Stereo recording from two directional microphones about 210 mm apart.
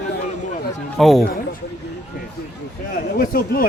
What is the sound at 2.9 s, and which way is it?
Speech, 45° left (ahead or behind).